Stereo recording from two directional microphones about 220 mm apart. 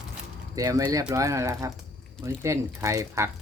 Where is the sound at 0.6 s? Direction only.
15° right (ahead or behind).